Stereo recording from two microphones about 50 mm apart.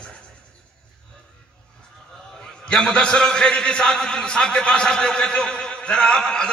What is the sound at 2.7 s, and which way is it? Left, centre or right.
A man's voice, centre.